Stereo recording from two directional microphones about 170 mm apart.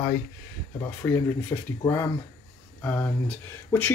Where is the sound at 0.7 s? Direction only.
15° left (ahead or behind).